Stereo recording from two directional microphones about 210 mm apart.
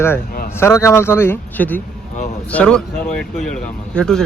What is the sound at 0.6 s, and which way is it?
Speech, 15° left (ahead or behind).